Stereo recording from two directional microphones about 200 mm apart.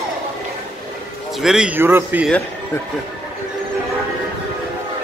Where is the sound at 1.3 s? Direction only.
Centre (ahead or behind).